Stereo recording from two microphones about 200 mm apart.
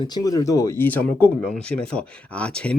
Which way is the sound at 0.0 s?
20° left (ahead or behind).